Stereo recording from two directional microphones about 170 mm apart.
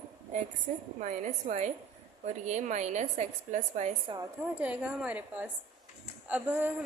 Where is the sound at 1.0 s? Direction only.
45° right (ahead or behind).